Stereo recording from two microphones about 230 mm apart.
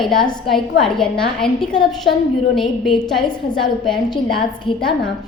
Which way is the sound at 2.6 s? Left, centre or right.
Centre.